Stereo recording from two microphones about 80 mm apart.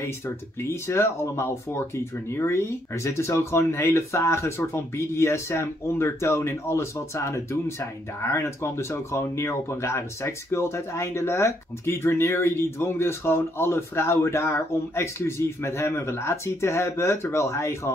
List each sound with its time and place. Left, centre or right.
0.8 s speech: left